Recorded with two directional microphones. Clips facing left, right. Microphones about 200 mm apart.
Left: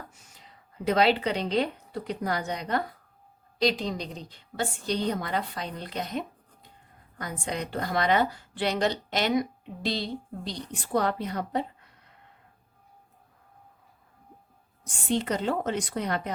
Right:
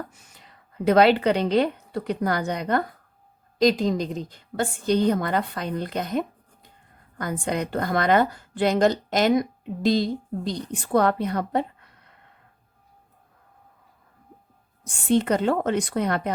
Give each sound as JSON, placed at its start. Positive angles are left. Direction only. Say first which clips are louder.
{"t": 0.9, "sound": "a woman's voice", "louder": "right 6 dB", "side_deg": -60}
{"t": 3.6, "sound": "a woman's voice", "louder": "right 7 dB", "side_deg": -45}
{"t": 15.2, "sound": "a woman's voice", "louder": "right 6 dB", "side_deg": -55}